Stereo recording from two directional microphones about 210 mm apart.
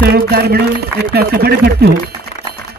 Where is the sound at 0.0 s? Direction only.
50° right (ahead or behind).